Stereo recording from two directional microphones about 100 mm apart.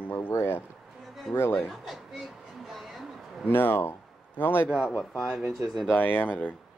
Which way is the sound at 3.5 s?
20° left (ahead or behind).